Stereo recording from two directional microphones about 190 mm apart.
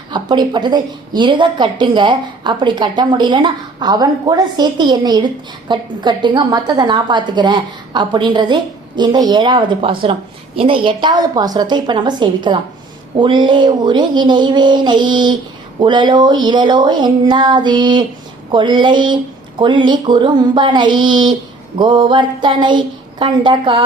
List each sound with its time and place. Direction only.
0.1 s a woman's voice: 25° right (ahead or behind)